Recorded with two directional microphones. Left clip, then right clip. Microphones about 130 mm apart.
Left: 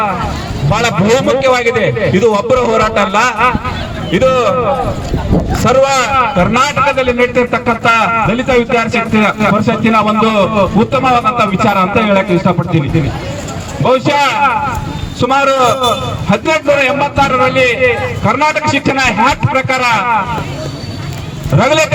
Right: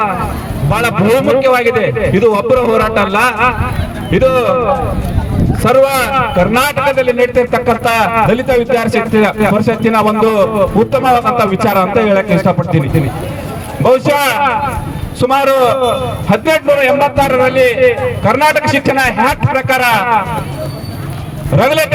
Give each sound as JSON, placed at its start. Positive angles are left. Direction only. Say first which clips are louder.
{"t": 0.7, "sound": "a man's voice", "louder": "even", "side_deg": -45}
{"t": 13.8, "sound": "a man's voice", "louder": "right 1 dB", "side_deg": -45}
{"t": 21.6, "sound": "a man's voice", "louder": "left 1 dB", "side_deg": -35}